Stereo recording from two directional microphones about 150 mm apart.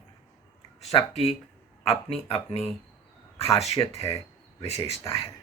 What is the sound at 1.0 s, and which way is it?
Speech, 45° left (ahead or behind).